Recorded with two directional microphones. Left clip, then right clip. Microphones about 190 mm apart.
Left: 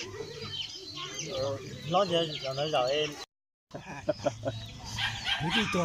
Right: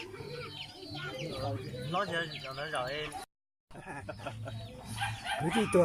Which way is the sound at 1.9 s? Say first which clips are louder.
Left 7 dB; 20° left (ahead or behind).